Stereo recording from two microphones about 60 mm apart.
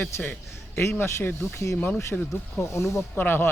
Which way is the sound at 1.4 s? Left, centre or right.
Left.